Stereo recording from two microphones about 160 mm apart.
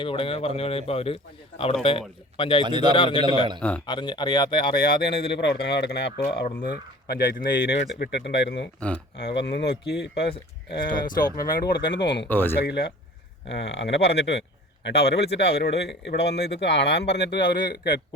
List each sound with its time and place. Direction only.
0.0 s a man's voice: 35° left (ahead or behind)
2.6 s speech: 30° right (ahead or behind)
2.9 s a man's voice: 30° left (ahead or behind)
3.6 s speech: 10° left (ahead or behind)
3.8 s speech: 30° left (ahead or behind)
4.8 s speech: 80° left
7.9 s speech: 85° left
11.3 s speech: 75° left (ahead or behind); by 12.3 s 90° left
12.3 s speech: 15° left (ahead or behind)
12.6 s speech: 90° left